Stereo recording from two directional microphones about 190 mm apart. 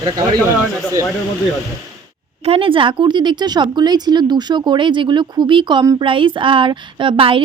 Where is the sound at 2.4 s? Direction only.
30° right (ahead or behind).